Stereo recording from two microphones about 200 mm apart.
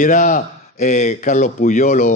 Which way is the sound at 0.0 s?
40° left (ahead or behind).